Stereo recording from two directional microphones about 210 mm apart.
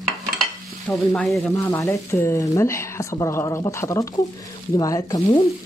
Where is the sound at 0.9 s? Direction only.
15° left (ahead or behind).